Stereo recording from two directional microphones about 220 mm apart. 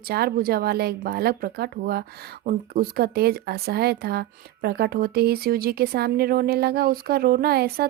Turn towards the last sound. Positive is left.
turn(degrees=-45)  # may be behind; listen again after turning